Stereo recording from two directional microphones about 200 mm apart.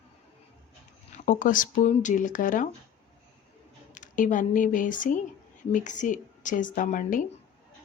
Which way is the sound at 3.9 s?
40° left (ahead or behind).